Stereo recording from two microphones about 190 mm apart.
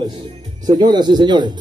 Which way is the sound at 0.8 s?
25° right (ahead or behind).